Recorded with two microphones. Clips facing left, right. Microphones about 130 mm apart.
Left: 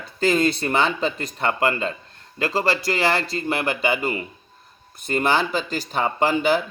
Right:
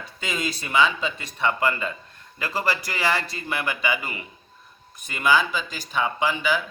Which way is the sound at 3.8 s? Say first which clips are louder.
Left 5 dB; 30° left (ahead or behind).